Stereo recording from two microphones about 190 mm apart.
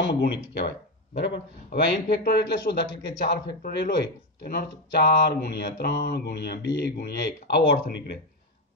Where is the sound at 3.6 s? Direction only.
50° left (ahead or behind).